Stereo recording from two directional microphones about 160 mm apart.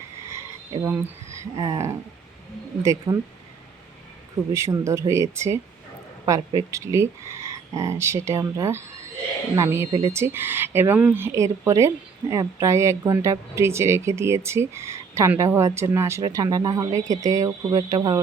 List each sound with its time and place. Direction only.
0.8 s speech: 10° right (ahead or behind)
4.5 s speech: 20° right (ahead or behind)